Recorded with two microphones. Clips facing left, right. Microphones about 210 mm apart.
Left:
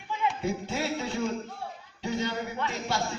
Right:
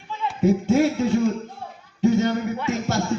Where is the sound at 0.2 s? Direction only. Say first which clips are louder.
Even; 15° left (ahead or behind).